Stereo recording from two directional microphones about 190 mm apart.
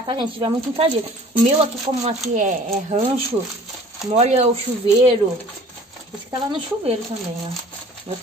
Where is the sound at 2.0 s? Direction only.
40° right (ahead or behind).